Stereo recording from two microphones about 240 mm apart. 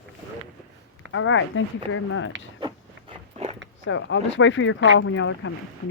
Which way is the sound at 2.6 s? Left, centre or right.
Right.